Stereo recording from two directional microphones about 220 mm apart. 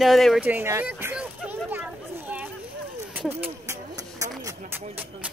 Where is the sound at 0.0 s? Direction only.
Centre (ahead or behind).